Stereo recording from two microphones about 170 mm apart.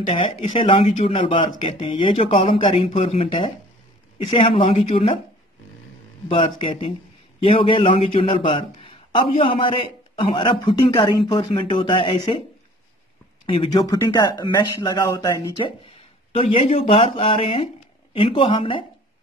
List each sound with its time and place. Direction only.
0.0 s a man's voice: 30° left (ahead or behind)
6.2 s a man's voice: 30° left (ahead or behind)
13.5 s speech: 30° left (ahead or behind)
16.3 s a man's voice: 35° left (ahead or behind)